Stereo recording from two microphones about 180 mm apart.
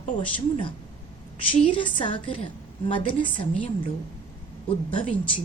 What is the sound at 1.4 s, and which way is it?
A woman's voice, 30° left (ahead or behind).